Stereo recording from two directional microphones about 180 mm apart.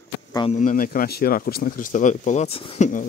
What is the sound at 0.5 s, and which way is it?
Speech, 45° left (ahead or behind).